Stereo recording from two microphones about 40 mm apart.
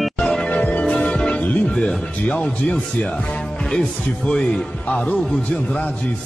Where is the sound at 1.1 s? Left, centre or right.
Left.